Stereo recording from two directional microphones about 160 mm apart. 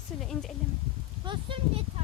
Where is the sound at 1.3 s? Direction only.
35° right (ahead or behind).